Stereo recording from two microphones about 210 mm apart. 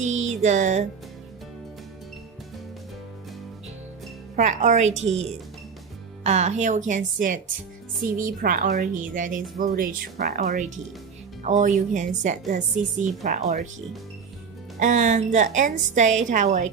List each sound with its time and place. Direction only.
0.0 s music: 35° right (ahead or behind)
4.4 s speech: 35° right (ahead or behind)
6.2 s speech: 35° right (ahead or behind)
14.8 s speech: 35° right (ahead or behind)